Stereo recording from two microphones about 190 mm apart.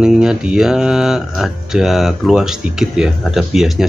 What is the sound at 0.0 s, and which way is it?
Speech, 5° right (ahead or behind).